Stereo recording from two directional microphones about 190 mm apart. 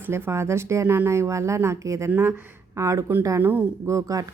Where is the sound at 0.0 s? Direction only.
15° right (ahead or behind).